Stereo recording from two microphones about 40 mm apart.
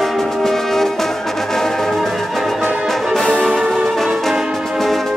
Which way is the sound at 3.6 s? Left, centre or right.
Centre.